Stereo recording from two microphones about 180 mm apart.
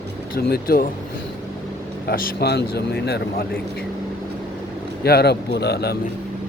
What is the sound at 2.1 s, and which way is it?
Speech, 60° left (ahead or behind).